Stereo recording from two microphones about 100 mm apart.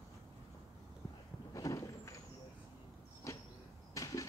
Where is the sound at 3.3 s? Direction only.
30° left (ahead or behind).